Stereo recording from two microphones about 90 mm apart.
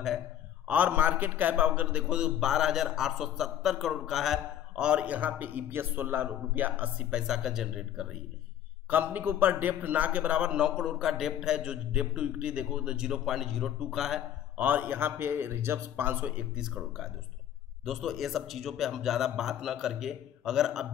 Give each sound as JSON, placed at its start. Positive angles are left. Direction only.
{"t": 0.7, "sound": "a man's voice", "side_deg": -15}
{"t": 8.9, "sound": "a man's voice", "side_deg": -20}
{"t": 14.6, "sound": "a man's voice", "side_deg": -20}
{"t": 16.6, "sound": "a man's voice", "side_deg": 0}